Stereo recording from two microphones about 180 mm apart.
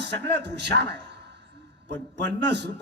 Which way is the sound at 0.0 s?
70° right (ahead or behind).